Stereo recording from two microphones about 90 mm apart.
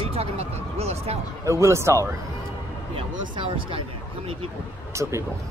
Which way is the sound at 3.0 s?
80° right.